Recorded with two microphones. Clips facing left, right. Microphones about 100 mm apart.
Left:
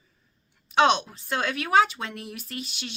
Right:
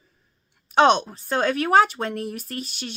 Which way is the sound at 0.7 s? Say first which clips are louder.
Right 4 dB; 40° right (ahead or behind).